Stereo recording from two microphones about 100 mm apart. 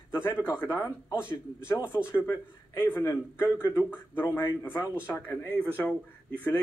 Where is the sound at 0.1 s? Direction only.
25° left (ahead or behind).